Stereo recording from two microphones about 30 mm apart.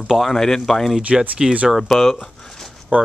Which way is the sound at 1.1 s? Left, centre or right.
Centre.